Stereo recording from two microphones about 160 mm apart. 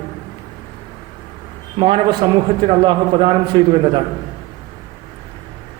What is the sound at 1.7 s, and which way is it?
A man's voice, 35° right (ahead or behind).